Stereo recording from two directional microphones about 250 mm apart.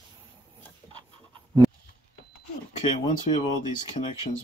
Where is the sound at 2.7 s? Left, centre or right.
Centre.